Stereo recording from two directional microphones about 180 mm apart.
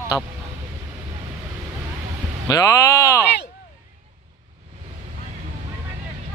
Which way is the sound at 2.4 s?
20° left (ahead or behind).